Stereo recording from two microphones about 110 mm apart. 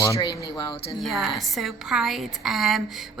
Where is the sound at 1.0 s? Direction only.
Centre (ahead or behind).